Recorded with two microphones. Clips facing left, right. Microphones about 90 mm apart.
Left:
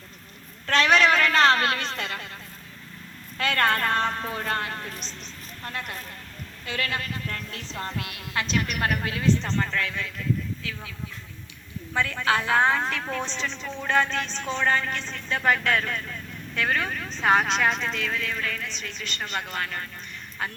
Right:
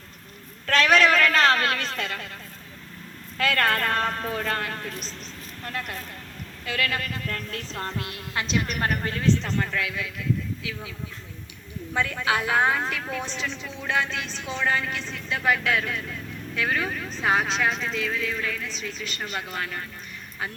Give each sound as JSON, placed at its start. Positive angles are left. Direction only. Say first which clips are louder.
{"t": 0.7, "sound": "a sound", "louder": "right 1 dB", "side_deg": 0}
{"t": 3.4, "sound": "speech", "louder": "even", "side_deg": 0}
{"t": 4.8, "sound": "speech", "louder": "right 2 dB", "side_deg": -5}
{"t": 6.7, "sound": "speech", "louder": "right 2 dB", "side_deg": 0}
{"t": 7.9, "sound": "speech", "louder": "even", "side_deg": -35}
{"t": 8.6, "sound": "a woman's voice", "louder": "even", "side_deg": -35}
{"t": 9.0, "sound": "speech", "louder": "even", "side_deg": 5}
{"t": 9.5, "sound": "a man's voice", "louder": "even", "side_deg": -10}
{"t": 11.9, "sound": "speech", "louder": "left 1 dB", "side_deg": -15}